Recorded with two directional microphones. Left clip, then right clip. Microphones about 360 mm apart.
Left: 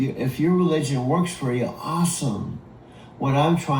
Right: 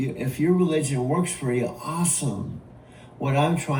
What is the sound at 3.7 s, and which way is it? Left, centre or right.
Speech, centre.